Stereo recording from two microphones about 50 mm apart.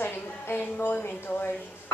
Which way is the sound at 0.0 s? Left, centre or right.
Left.